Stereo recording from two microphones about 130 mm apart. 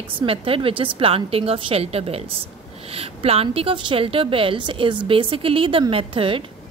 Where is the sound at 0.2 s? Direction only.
45° right (ahead or behind).